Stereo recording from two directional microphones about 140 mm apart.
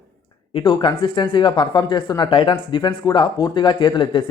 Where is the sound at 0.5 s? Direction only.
40° left (ahead or behind).